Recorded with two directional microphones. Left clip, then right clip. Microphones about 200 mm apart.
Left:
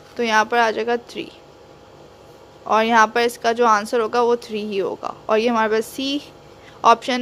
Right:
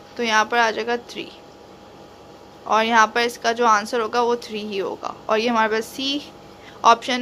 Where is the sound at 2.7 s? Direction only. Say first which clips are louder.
Left 1 dB; 30° left (ahead or behind).